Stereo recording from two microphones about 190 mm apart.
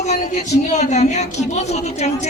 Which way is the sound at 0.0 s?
35° left (ahead or behind).